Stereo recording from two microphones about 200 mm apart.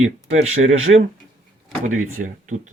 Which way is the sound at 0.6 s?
80° right.